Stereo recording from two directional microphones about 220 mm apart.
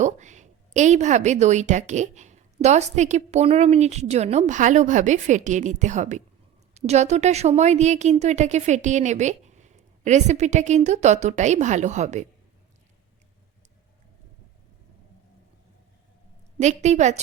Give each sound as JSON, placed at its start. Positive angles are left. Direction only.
{"t": 0.0, "sound": "a woman's voice", "side_deg": -35}
{"t": 16.6, "sound": "a woman's voice", "side_deg": -30}